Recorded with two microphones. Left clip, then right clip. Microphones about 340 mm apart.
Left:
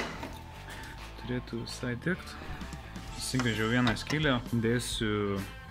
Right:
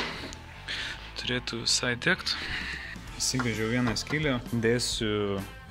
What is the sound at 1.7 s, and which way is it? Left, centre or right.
Speech, right.